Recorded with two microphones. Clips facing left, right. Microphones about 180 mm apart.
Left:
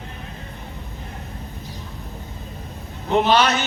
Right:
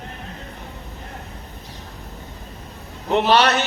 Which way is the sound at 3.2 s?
65° right (ahead or behind).